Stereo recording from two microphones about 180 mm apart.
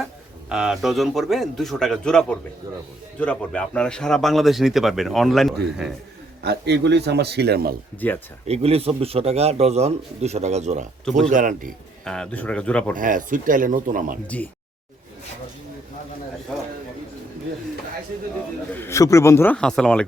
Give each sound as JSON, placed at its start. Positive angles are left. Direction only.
{"t": 0.0, "sound": "speech", "side_deg": -5}
{"t": 6.4, "sound": "a man's voice", "side_deg": -65}
{"t": 8.0, "sound": "speech", "side_deg": 10}
{"t": 8.4, "sound": "a man's voice", "side_deg": -35}
{"t": 12.0, "sound": "speech", "side_deg": 5}
{"t": 13.0, "sound": "speech", "side_deg": -50}
{"t": 14.3, "sound": "speech", "side_deg": 10}
{"t": 16.5, "sound": "a sound", "side_deg": 5}
{"t": 18.7, "sound": "a man's voice", "side_deg": 15}